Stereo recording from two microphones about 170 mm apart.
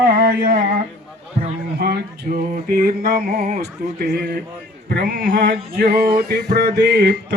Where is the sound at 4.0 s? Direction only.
70° right (ahead or behind).